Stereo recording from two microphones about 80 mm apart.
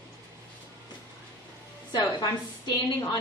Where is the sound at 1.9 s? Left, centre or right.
Left.